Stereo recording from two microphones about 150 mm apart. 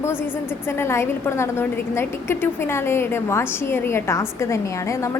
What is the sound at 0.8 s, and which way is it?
A woman's voice, 15° left (ahead or behind).